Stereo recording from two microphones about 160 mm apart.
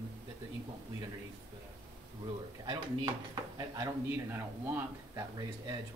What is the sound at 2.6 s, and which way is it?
Speech, 25° right (ahead or behind).